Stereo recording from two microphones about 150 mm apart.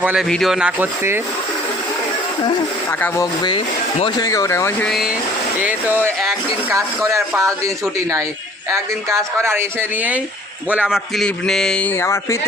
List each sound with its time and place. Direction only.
0.0 s a man's voice: 10° right (ahead or behind)
4.2 s speech: 20° left (ahead or behind)
4.9 s a man's voice: centre (ahead or behind)
5.5 s a man's voice: 10° right (ahead or behind); by 12.4 s 20° left (ahead or behind)